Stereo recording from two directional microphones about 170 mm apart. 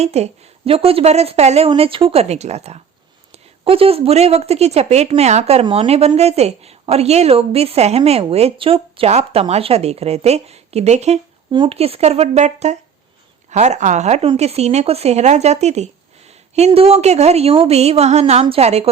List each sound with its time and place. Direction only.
0.0 s a woman's voice: 40° right (ahead or behind)